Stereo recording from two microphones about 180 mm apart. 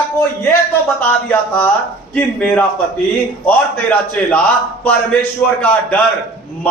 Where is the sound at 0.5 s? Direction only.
10° left (ahead or behind).